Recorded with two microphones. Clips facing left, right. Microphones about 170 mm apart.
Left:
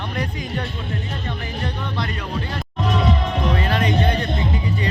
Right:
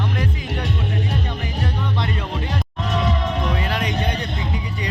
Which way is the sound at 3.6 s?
10° right (ahead or behind).